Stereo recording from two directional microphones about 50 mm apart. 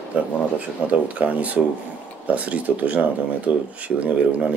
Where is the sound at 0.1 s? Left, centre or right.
Right.